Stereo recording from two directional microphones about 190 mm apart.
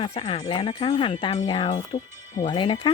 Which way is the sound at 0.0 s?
30° left (ahead or behind).